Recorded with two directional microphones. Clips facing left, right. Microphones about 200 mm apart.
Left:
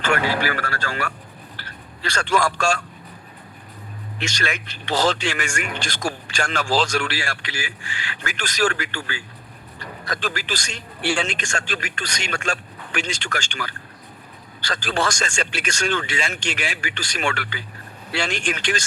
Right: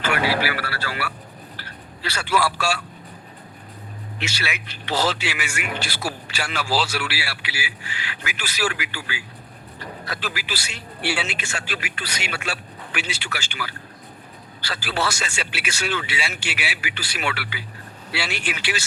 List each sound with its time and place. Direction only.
0.0 s a man's voice: 10° right (ahead or behind)
4.2 s speech: 5° right (ahead or behind)